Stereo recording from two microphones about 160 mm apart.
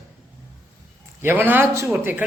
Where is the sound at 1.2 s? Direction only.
15° right (ahead or behind).